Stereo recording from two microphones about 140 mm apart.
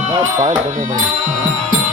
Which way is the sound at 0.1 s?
30° right (ahead or behind).